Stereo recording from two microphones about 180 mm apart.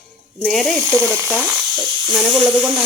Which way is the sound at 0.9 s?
15° right (ahead or behind).